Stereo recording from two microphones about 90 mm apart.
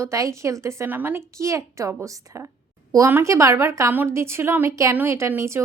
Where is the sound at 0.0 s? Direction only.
35° right (ahead or behind).